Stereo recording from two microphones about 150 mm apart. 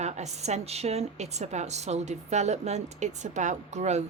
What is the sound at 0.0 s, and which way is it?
Speech, 50° right (ahead or behind).